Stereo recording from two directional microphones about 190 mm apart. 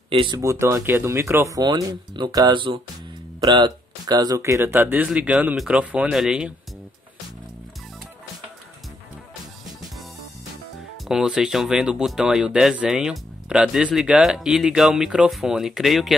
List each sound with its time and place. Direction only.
0.2 s speech: 20° right (ahead or behind); by 6.5 s 5° right (ahead or behind)
11.1 s speech: 5° right (ahead or behind)